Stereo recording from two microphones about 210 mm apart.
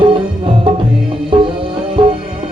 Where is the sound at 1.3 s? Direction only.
25° right (ahead or behind).